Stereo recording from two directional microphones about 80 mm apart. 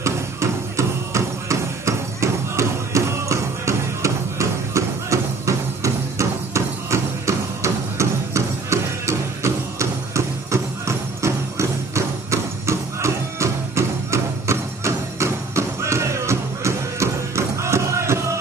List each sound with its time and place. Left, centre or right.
0.0 s music: right